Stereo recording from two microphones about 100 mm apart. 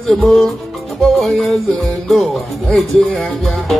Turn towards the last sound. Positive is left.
turn(degrees=5)  # may be behind; listen again after turning